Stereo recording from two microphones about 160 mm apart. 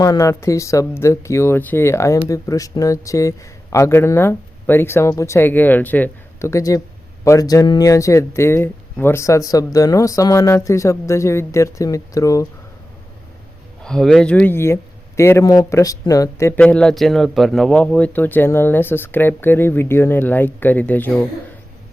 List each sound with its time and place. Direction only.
0.0 s speech: 20° left (ahead or behind)
13.8 s speech: 5° left (ahead or behind); by 16.6 s 20° left (ahead or behind)
16.6 s speech: 5° left (ahead or behind)